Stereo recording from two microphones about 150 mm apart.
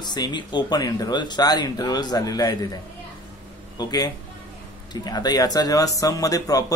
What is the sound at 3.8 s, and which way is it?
A man's voice, 25° left (ahead or behind).